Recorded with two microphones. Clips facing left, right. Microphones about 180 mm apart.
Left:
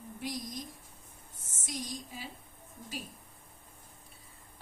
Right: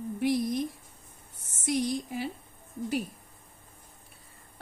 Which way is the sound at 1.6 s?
65° right (ahead or behind).